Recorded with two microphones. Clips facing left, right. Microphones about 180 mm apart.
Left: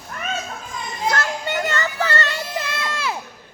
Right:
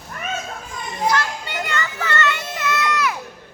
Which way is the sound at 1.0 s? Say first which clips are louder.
Right 1 dB; 50° left (ahead or behind).